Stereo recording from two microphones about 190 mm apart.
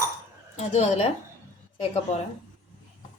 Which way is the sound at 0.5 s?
35° left (ahead or behind).